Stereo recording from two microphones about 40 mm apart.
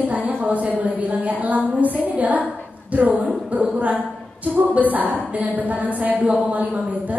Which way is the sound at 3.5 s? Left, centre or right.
Right.